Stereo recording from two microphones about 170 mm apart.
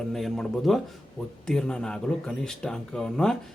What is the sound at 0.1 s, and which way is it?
Speech, centre (ahead or behind).